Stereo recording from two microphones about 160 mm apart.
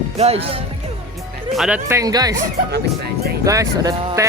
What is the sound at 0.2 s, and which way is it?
Speech, 40° right (ahead or behind).